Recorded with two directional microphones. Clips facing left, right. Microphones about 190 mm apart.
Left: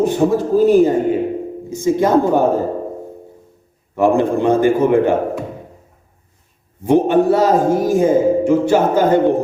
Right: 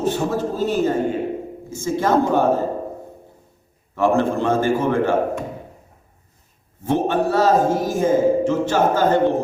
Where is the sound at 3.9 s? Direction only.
15° left (ahead or behind).